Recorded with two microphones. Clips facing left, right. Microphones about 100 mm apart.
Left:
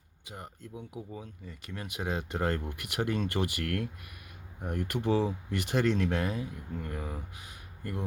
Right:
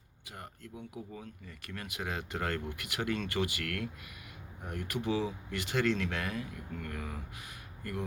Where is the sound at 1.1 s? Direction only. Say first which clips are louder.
Left 3 dB; 20° left (ahead or behind); by 3.8 s 40° left (ahead or behind).